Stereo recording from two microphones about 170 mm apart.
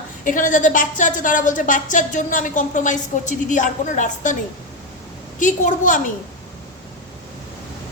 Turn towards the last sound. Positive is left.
turn(degrees=50)  # may be behind; listen again after turning